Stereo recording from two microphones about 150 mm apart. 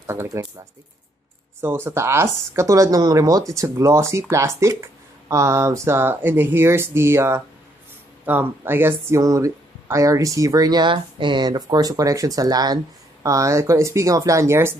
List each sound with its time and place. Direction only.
0.0 s speech: 15° right (ahead or behind)
1.6 s speech: 15° right (ahead or behind)